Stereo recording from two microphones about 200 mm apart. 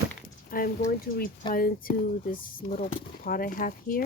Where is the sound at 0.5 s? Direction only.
45° left (ahead or behind).